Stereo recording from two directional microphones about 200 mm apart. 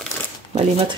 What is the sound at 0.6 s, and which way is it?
Speech, 25° right (ahead or behind).